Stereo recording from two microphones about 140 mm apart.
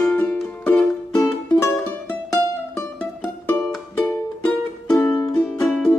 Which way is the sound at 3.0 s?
5° left (ahead or behind).